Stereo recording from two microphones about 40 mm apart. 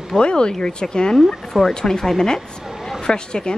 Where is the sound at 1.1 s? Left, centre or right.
Centre.